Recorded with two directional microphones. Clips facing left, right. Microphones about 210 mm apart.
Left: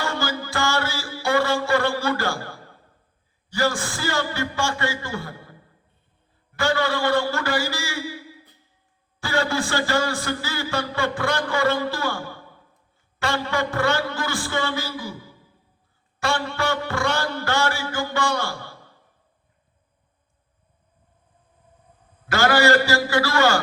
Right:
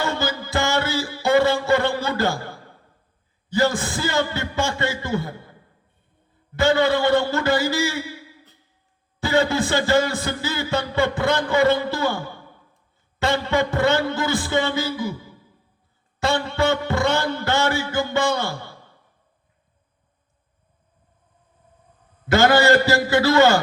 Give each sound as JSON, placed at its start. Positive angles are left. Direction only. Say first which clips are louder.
{"t": 0.0, "sound": "music", "louder": "right 2 dB", "side_deg": -20}
{"t": 3.5, "sound": "speech", "louder": "right 3 dB", "side_deg": -20}
{"t": 6.6, "sound": "speech", "louder": "right 5 dB", "side_deg": -20}
{"t": 9.2, "sound": "speech", "louder": "right 4 dB", "side_deg": -20}
{"t": 16.2, "sound": "speech", "louder": "right 4 dB", "side_deg": -20}
{"t": 22.3, "sound": "speech", "louder": "right 3 dB", "side_deg": -20}